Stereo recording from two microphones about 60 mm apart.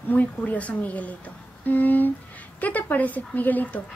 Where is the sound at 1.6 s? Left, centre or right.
Left.